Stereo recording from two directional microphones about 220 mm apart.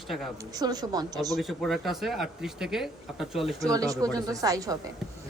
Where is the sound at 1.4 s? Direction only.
Centre (ahead or behind).